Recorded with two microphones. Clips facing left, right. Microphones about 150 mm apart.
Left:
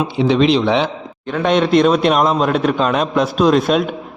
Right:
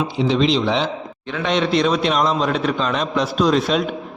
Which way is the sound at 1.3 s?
50° left (ahead or behind).